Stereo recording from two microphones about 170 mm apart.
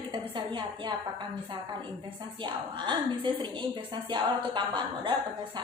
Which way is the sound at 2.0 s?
25° right (ahead or behind).